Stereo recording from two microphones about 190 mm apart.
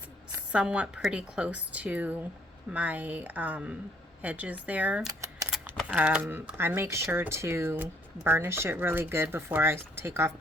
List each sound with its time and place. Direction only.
0.3 s speech: 5° right (ahead or behind)
5.0 s a sound: 15° right (ahead or behind)
5.5 s speech: 5° right (ahead or behind)